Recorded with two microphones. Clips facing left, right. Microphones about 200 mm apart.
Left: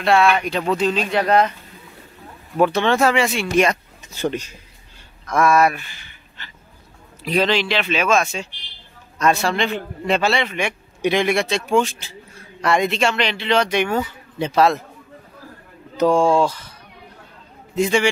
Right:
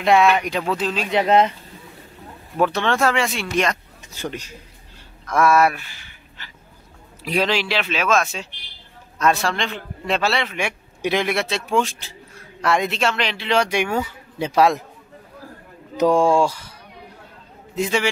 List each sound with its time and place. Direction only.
0.0 s speech: 15° right (ahead or behind)
0.6 s a man's voice: 5° right (ahead or behind)
1.1 s speech: 20° right (ahead or behind)
2.6 s a man's voice: centre (ahead or behind)
5.2 s a man's voice: 5° right (ahead or behind)
16.0 s speech: 15° right (ahead or behind)
17.7 s a man's voice: 5° right (ahead or behind)